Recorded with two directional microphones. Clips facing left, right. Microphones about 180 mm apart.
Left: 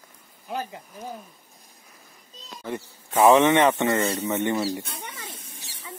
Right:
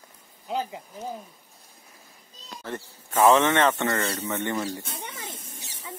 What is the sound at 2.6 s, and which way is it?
Speech, 15° left (ahead or behind).